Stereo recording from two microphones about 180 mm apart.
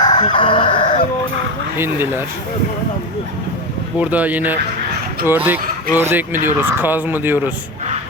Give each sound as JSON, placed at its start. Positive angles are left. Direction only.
{"t": 0.0, "sound": "chicken", "side_deg": 25}
{"t": 1.8, "sound": "speech", "side_deg": -10}
{"t": 3.9, "sound": "speech", "side_deg": -10}